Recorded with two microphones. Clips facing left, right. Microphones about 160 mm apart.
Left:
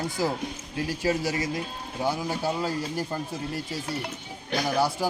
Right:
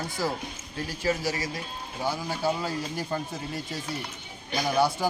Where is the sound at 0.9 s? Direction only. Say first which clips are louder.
Left 1 dB; 15° left (ahead or behind).